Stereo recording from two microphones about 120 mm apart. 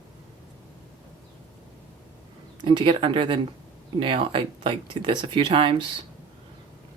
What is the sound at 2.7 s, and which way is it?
Speech, 45° right (ahead or behind).